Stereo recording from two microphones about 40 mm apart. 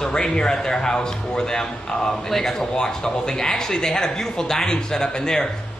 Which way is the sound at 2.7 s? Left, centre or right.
Centre.